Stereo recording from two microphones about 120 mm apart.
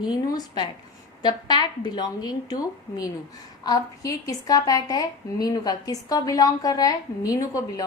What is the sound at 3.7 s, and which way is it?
A woman's voice, 30° left (ahead or behind).